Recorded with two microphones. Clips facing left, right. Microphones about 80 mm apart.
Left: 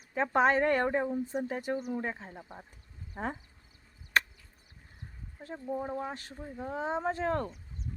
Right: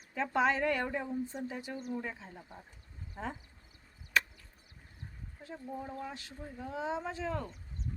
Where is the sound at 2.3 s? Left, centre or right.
Left.